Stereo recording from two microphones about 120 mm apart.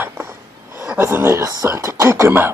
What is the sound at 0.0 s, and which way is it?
Speech, 20° right (ahead or behind).